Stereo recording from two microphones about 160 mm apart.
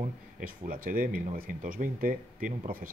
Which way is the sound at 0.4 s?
60° right (ahead or behind).